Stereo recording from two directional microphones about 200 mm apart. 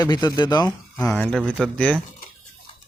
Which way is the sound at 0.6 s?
10° left (ahead or behind).